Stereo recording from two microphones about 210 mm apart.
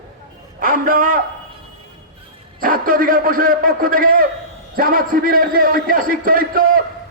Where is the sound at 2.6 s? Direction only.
40° right (ahead or behind).